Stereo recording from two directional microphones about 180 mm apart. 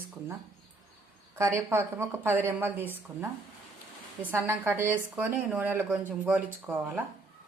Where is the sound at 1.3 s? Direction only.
15° right (ahead or behind).